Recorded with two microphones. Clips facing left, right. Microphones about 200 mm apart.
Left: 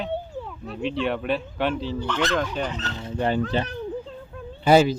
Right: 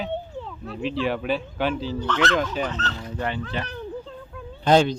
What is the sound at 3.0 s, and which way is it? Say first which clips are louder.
Speech: left 3 dB; 25° left (ahead or behind).